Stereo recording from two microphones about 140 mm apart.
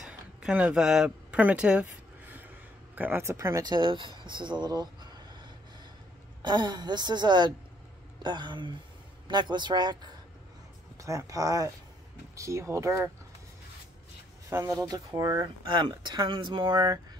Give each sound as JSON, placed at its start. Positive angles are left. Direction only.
{"t": 0.0, "sound": "a sound", "side_deg": -5}
{"t": 3.0, "sound": "a woman's voice", "side_deg": -15}
{"t": 11.0, "sound": "speech", "side_deg": -25}
{"t": 14.5, "sound": "speech", "side_deg": -25}